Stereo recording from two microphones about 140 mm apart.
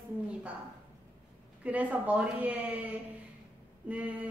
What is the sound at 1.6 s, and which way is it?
A woman's voice, 10° right (ahead or behind).